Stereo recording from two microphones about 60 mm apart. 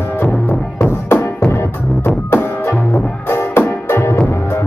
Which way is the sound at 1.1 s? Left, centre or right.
Left.